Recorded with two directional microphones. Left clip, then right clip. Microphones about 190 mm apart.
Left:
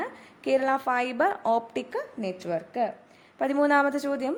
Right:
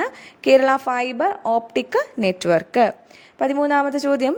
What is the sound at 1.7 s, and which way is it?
A woman's voice, 30° right (ahead or behind).